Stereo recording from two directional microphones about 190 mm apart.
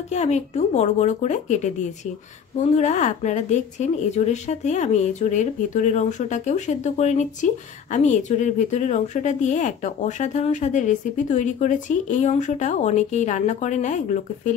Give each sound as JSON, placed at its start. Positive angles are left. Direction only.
{"t": 0.1, "sound": "speech", "side_deg": 35}